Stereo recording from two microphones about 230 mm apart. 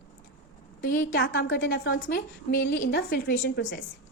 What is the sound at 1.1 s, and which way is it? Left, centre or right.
A woman's voice, left.